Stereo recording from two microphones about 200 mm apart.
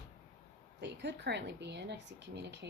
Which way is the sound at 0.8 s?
60° right (ahead or behind).